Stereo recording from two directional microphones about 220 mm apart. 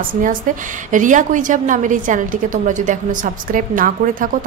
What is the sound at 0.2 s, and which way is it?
A woman's voice, 35° right (ahead or behind).